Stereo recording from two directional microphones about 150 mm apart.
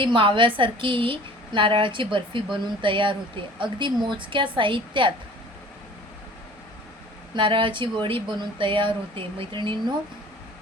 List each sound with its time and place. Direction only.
0.0 s a woman's voice: 35° right (ahead or behind)
7.3 s a woman's voice: 35° right (ahead or behind)